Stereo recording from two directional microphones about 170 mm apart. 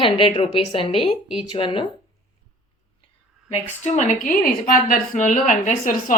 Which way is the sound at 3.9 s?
45° left (ahead or behind).